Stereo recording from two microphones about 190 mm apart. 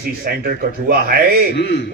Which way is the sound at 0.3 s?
50° right (ahead or behind).